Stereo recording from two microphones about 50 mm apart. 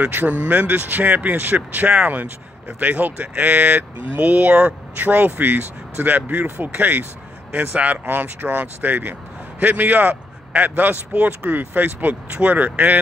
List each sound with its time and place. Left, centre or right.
0.1 s a man's voice: right
4.9 s a man's voice: right